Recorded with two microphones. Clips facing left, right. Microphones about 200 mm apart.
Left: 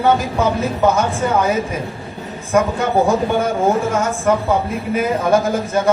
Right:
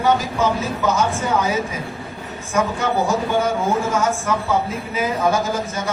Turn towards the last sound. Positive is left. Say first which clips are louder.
# left 6 dB
turn(degrees=55)  # may be behind; listen again after turning